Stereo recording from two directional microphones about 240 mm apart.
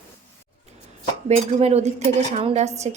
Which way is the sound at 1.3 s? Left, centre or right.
Right.